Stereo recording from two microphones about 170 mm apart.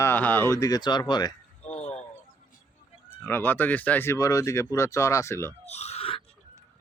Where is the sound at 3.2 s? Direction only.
10° left (ahead or behind).